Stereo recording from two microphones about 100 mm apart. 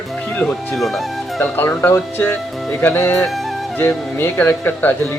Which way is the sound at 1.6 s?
20° left (ahead or behind).